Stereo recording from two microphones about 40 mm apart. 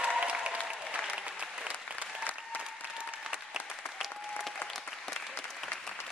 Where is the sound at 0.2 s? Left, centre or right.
Right.